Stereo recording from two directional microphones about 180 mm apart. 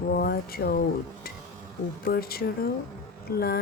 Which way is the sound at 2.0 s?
55° left (ahead or behind).